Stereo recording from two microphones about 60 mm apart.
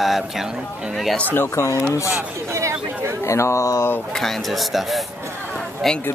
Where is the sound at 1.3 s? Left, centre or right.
Left.